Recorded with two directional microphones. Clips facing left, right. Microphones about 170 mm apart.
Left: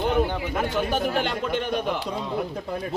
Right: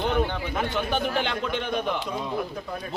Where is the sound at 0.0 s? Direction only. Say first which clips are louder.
Left 2 dB; 5° left (ahead or behind).